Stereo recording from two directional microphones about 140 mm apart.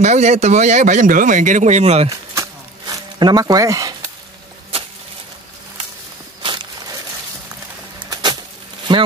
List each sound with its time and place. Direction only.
0.0 s speech: 55° right (ahead or behind)
2.9 s speech: 30° right (ahead or behind)
6.4 s walk: 35° right (ahead or behind)
8.0 s a sound: 30° right (ahead or behind)
8.9 s speech: 35° right (ahead or behind)